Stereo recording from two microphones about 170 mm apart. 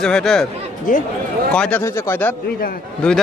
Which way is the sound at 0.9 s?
50° left (ahead or behind).